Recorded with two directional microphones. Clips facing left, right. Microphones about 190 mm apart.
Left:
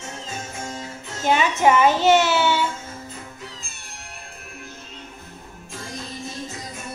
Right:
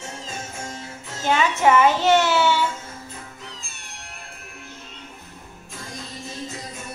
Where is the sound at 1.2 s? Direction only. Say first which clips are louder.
Left 1 dB; 15° left (ahead or behind).